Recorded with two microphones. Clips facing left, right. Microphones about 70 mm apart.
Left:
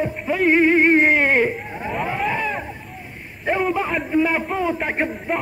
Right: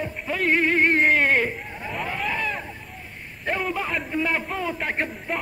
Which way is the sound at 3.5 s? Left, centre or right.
Centre.